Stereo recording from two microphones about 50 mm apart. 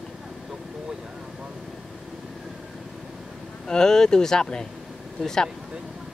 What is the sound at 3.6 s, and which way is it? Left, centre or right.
Speech, centre.